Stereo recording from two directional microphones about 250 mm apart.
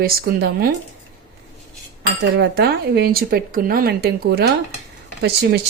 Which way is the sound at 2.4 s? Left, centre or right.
Right.